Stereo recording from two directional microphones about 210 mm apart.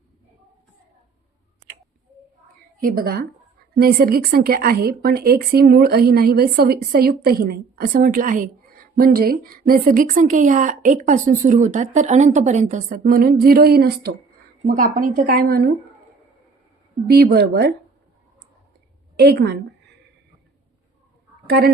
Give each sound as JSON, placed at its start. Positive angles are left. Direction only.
{"t": 2.8, "sound": "a woman's voice", "side_deg": -45}
{"t": 17.1, "sound": "speech", "side_deg": -50}
{"t": 19.2, "sound": "a woman's voice", "side_deg": -50}
{"t": 21.4, "sound": "speech", "side_deg": -50}